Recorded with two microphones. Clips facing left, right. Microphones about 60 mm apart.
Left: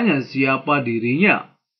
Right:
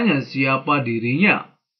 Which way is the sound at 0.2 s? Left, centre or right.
Left.